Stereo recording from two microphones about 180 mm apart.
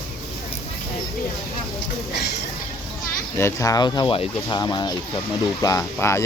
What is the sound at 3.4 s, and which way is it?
Speech, 20° left (ahead or behind).